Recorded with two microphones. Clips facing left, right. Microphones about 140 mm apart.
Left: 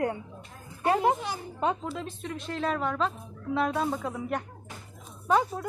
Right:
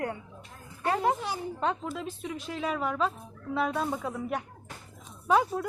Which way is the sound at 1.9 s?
5° right (ahead or behind).